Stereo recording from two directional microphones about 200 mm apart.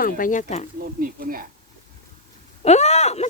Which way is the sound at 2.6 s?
35° left (ahead or behind).